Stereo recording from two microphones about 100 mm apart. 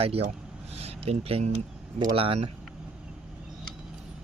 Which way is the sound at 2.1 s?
70° right (ahead or behind).